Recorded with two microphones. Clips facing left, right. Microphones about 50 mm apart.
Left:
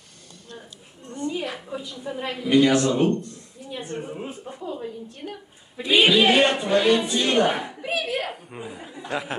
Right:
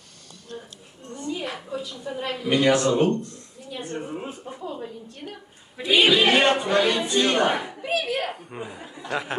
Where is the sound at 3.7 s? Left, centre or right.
Centre.